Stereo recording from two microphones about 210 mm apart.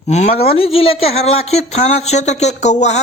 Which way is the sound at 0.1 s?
30° left (ahead or behind).